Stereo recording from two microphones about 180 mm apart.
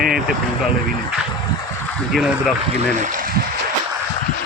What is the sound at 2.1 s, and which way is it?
Speech, centre (ahead or behind).